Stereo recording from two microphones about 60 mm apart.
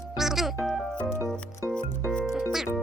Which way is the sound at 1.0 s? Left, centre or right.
Left.